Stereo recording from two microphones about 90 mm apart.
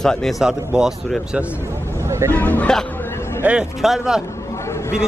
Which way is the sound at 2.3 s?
20° left (ahead or behind).